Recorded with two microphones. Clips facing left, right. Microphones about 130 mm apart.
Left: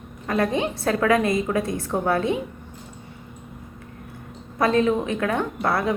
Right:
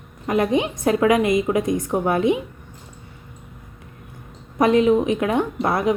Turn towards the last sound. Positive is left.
turn(degrees=-20)  # may be behind; listen again after turning